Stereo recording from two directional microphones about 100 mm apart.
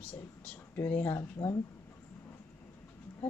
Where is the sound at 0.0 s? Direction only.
15° left (ahead or behind).